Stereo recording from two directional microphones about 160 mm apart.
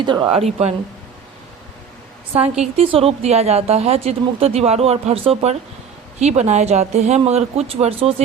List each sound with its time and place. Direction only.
0.0 s a woman's voice: 30° right (ahead or behind)
2.3 s a woman's voice: 40° right (ahead or behind)